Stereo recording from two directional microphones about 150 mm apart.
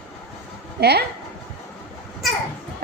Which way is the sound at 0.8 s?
90° right.